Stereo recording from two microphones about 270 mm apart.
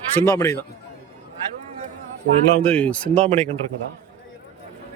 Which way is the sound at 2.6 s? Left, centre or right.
Centre.